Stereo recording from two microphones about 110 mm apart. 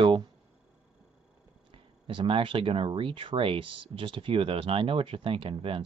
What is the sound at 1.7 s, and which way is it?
Speech, 50° right (ahead or behind).